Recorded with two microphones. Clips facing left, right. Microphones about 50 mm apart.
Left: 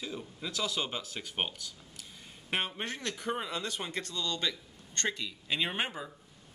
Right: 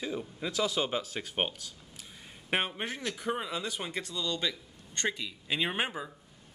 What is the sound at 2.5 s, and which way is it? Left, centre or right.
Speech, centre.